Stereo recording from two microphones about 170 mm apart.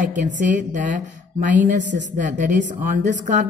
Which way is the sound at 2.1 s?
50° right (ahead or behind).